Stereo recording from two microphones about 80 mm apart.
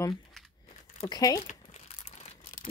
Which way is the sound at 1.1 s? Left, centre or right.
Left.